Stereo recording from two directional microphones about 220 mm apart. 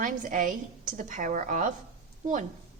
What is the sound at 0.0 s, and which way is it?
A woman's voice, 35° right (ahead or behind).